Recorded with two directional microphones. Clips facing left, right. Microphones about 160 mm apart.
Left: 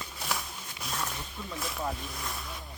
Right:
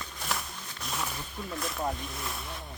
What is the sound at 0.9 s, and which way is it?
Snake, centre (ahead or behind).